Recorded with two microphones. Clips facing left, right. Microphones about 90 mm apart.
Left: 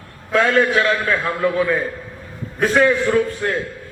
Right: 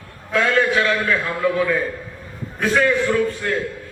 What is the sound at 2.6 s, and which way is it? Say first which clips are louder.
Speech: left 2 dB; 40° left (ahead or behind).